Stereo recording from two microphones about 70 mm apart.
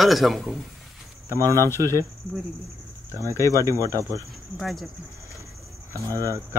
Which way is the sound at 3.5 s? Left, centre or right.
Right.